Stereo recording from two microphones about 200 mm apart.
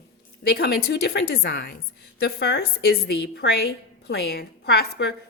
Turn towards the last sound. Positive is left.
turn(degrees=55)  # may be behind; listen again after turning